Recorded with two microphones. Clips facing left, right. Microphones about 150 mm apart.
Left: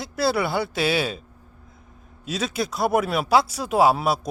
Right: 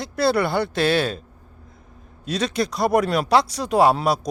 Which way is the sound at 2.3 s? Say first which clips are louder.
Right 3 dB; 5° left (ahead or behind).